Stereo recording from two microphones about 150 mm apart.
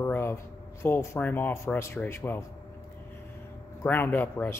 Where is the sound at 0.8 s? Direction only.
15° left (ahead or behind).